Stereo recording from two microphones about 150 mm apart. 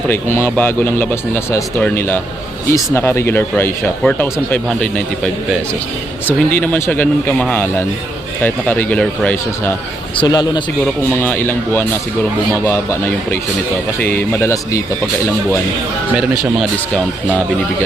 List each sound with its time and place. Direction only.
0.1 s speech: 15° left (ahead or behind)
10.2 s speech: 30° left (ahead or behind)
11.2 s speech: 15° left (ahead or behind)